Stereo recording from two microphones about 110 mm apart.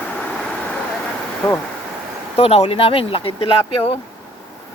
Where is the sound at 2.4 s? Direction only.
65° left (ahead or behind).